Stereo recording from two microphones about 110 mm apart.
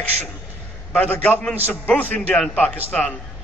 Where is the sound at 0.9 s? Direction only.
15° left (ahead or behind).